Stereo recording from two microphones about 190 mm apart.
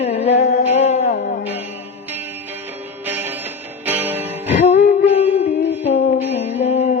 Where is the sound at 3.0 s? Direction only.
10° right (ahead or behind).